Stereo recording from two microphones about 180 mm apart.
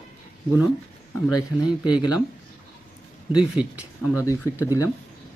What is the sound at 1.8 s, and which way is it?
Speech, 25° left (ahead or behind).